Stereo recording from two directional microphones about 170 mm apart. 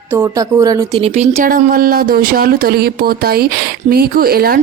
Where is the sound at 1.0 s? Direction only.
35° right (ahead or behind).